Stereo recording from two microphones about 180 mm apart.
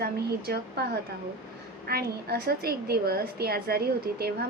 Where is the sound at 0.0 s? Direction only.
60° right (ahead or behind).